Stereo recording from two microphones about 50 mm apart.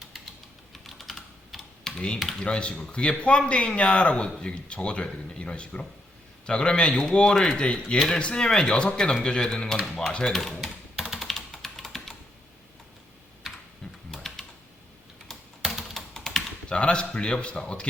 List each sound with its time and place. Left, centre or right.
0.7 s typing: centre
2.4 s speech: left
7.9 s speech: centre
10.3 s speech: centre
11.2 s computer keyboard: centre
13.8 s typing: centre
15.6 s typing: centre
16.1 s typing: centre
16.7 s speech: left